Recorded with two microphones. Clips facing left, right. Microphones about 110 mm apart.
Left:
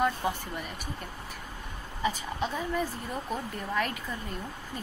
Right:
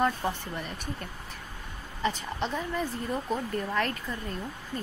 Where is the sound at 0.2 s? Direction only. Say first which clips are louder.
Even; 10° left (ahead or behind).